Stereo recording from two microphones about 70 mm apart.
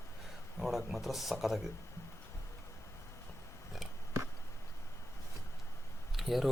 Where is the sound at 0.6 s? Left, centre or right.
Centre.